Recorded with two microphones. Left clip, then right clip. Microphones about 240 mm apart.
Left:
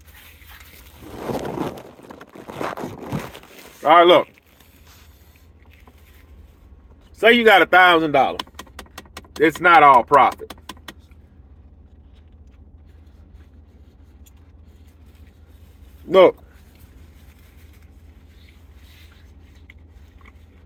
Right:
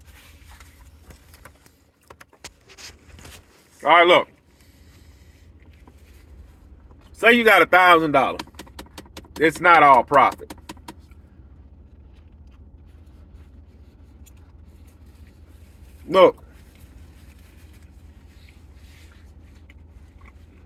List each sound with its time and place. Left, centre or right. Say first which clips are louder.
3.8 s speech: left 2 dB; centre
7.2 s a man's voice: left 2 dB; centre
9.4 s a man's voice: left 2 dB; centre
16.0 s speech: left 2 dB; centre